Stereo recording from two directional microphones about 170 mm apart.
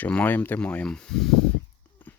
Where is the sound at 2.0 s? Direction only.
10° left (ahead or behind).